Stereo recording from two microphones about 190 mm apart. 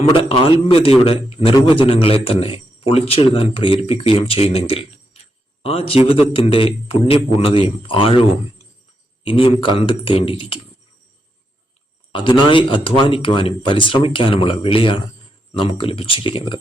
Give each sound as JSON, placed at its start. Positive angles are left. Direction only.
{"t": 0.1, "sound": "a man's voice", "side_deg": 25}
{"t": 4.7, "sound": "a sound", "side_deg": 30}
{"t": 5.6, "sound": "a man's voice", "side_deg": 30}
{"t": 12.1, "sound": "a man's voice", "side_deg": 25}